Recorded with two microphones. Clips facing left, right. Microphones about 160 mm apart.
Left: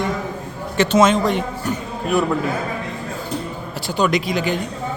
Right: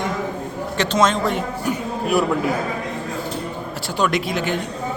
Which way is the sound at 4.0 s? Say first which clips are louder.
Left 2 dB; centre (ahead or behind).